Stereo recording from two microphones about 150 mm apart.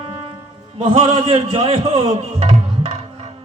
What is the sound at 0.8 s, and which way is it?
A man's voice, 35° right (ahead or behind).